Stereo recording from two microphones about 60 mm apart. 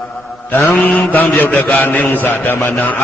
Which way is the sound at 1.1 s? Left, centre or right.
Left.